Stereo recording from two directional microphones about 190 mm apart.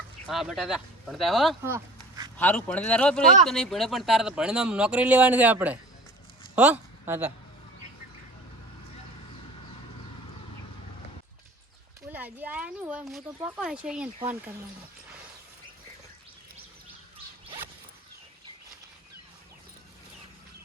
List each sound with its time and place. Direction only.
0.3 s speech: centre (ahead or behind)
1.6 s a sound: 15° right (ahead or behind)
2.4 s a woman's voice: 5° left (ahead or behind); by 7.3 s 10° right (ahead or behind)
12.1 s speech: 10° right (ahead or behind)